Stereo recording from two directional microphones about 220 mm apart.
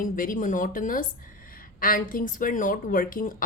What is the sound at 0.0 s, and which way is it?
Speech, 35° left (ahead or behind).